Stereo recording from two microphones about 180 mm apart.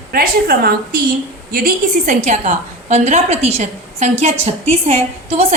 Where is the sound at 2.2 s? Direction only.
40° right (ahead or behind).